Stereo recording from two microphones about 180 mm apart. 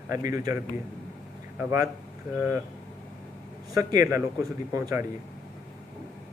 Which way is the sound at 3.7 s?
20° right (ahead or behind).